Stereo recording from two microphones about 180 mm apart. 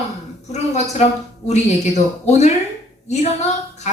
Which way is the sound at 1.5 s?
40° left (ahead or behind).